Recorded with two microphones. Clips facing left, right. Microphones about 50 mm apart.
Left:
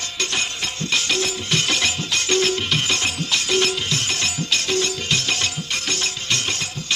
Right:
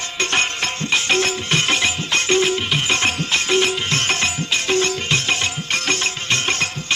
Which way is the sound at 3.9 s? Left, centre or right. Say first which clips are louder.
Right 4 dB; right.